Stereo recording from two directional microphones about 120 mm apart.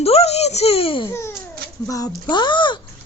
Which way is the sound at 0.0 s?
60° left (ahead or behind).